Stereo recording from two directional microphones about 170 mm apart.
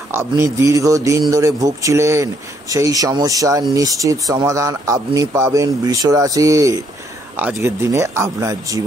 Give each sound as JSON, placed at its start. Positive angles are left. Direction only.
{"t": 0.1, "sound": "speech", "side_deg": -15}